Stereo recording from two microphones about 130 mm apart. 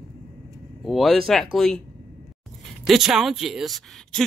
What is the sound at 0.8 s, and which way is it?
Speech, centre (ahead or behind).